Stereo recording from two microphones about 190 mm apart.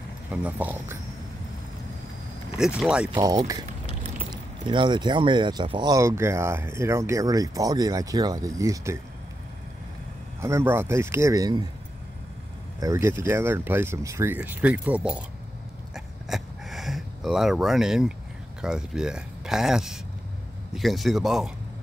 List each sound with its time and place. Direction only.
0.3 s speech: 10° right (ahead or behind)
2.5 s speech: 5° right (ahead or behind)
3.2 s speech: 20° right (ahead or behind)
10.4 s speech: 15° right (ahead or behind)
12.8 s speech: 15° right (ahead or behind)
15.9 s a sound: centre (ahead or behind)
18.6 s speech: 5° right (ahead or behind)